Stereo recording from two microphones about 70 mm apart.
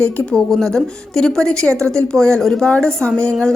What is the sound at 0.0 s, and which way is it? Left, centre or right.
A woman's voice, centre.